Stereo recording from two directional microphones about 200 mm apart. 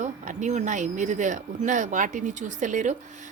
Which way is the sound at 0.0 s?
40° right (ahead or behind).